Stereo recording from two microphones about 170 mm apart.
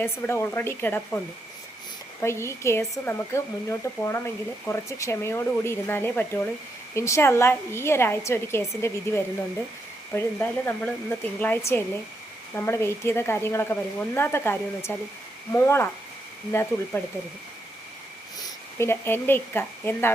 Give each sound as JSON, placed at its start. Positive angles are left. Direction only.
{"t": 0.0, "sound": "speech", "side_deg": 15}
{"t": 2.2, "sound": "speech", "side_deg": 15}
{"t": 18.8, "sound": "speech", "side_deg": 15}